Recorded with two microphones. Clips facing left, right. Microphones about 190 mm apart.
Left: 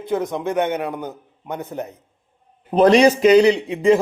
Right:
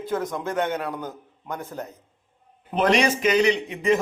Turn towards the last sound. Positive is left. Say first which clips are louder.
# left 6 dB
turn(degrees=30)  # may be behind; listen again after turning